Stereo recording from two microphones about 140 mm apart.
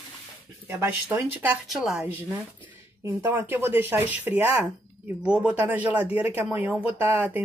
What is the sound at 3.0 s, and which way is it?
Speech, 15° right (ahead or behind).